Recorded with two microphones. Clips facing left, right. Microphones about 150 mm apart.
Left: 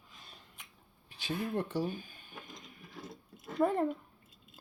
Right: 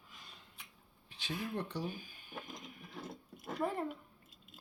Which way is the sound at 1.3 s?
50° left (ahead or behind).